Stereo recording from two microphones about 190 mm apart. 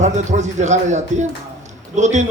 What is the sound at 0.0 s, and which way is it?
A man's voice, 40° right (ahead or behind).